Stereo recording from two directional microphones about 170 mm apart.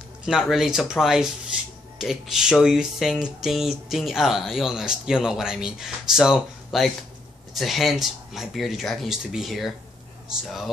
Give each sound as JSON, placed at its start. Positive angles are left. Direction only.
{"t": 0.2, "sound": "speech", "side_deg": 0}